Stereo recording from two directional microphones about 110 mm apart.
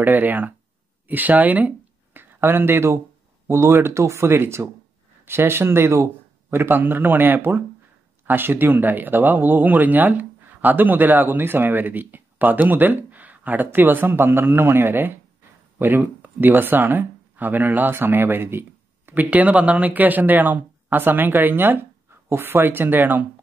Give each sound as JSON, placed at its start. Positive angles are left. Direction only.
{"t": 0.0, "sound": "a man's voice", "side_deg": -15}